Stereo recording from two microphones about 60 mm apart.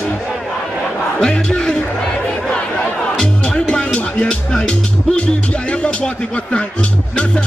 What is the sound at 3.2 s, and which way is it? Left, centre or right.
Music, centre.